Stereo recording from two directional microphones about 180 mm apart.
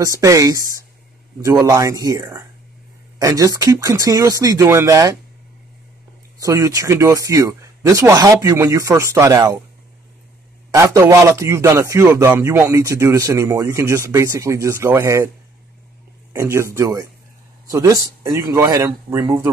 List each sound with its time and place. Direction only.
0.0 s speech: 20° right (ahead or behind)
6.4 s a man's voice: 20° right (ahead or behind)
10.7 s a man's voice: 20° right (ahead or behind)
16.3 s a man's voice: 15° right (ahead or behind)